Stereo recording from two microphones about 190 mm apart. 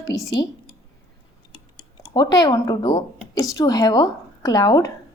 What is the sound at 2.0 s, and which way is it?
Speech, 25° left (ahead or behind).